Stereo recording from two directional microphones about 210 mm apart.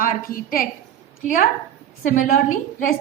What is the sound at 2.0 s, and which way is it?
Speech, 40° left (ahead or behind).